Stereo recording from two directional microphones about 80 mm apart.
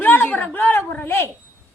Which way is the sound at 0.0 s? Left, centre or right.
Left.